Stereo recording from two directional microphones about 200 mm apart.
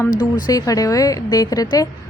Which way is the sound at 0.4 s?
15° left (ahead or behind).